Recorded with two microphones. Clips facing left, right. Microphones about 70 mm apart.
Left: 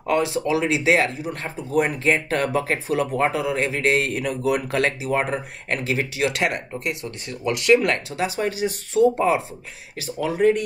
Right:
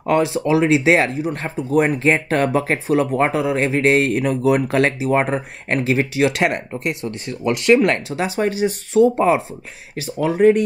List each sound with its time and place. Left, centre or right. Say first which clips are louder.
0.0 s speech: right 4 dB; right